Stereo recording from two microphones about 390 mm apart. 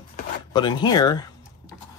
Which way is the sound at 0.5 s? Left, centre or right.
Centre.